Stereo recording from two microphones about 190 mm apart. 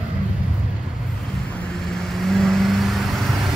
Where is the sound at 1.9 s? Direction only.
Centre (ahead or behind).